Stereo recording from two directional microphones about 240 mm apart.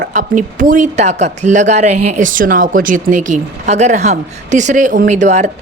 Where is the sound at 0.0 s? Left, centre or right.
Right.